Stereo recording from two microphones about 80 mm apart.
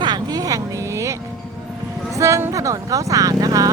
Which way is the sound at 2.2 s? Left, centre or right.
Right.